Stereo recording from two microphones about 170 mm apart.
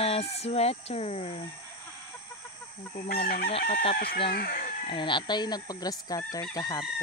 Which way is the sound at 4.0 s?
75° left (ahead or behind).